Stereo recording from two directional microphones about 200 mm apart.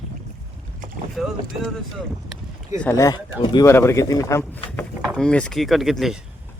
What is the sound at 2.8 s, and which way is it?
Speech, 15° left (ahead or behind).